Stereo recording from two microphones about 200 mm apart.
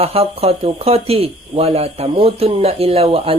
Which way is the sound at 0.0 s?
30° right (ahead or behind).